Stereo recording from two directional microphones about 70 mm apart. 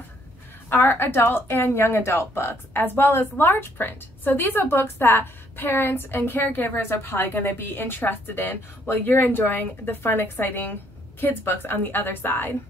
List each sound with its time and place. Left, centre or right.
0.7 s a woman's voice: left